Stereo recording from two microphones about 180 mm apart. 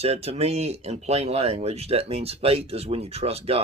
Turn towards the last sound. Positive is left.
turn(degrees=-35)  # may be behind; listen again after turning